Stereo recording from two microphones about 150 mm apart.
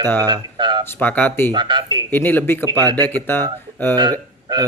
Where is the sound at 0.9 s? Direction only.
10° left (ahead or behind).